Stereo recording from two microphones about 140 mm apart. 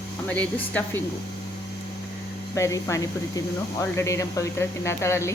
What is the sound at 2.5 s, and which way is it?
Speech, 20° left (ahead or behind).